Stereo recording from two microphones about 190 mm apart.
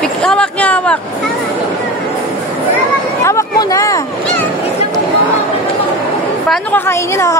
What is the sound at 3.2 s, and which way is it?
Speech, 15° left (ahead or behind).